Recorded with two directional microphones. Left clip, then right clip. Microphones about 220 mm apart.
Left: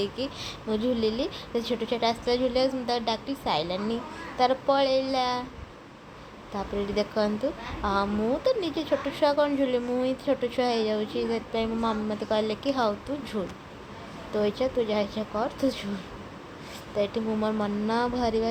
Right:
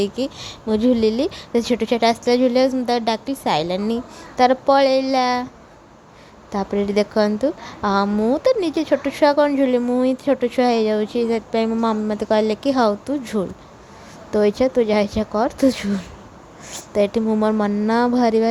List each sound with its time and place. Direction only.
0.0 s a woman's voice: 40° right (ahead or behind)
6.5 s a woman's voice: 40° right (ahead or behind)